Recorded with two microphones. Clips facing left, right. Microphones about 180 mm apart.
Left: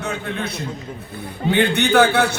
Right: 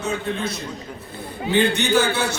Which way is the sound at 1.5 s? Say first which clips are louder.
Left 2 dB; 60° left (ahead or behind).